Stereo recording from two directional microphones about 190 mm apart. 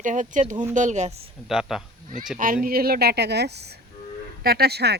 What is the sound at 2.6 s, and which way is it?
A woman's voice, 50° right (ahead or behind).